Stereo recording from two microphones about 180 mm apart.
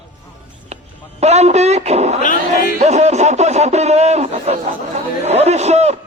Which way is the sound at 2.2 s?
50° left (ahead or behind).